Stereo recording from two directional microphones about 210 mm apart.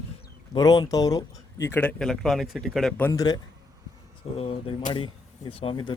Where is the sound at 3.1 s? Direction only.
20° left (ahead or behind).